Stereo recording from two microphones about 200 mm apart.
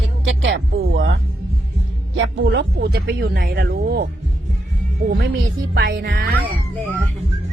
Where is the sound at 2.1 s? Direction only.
70° right (ahead or behind).